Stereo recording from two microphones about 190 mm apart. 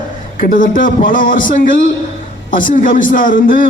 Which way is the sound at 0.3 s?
45° left (ahead or behind).